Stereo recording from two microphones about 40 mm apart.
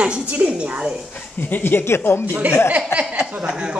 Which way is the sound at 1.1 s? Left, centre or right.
Left.